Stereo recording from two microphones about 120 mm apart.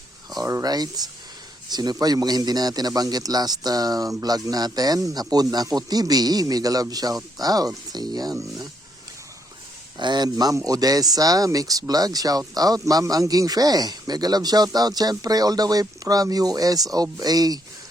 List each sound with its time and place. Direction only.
0.3 s speech: 30° right (ahead or behind)
10.0 s speech: 35° right (ahead or behind)